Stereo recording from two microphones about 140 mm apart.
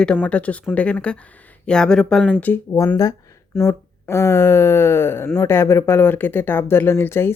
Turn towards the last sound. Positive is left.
turn(degrees=15)  # may be behind; listen again after turning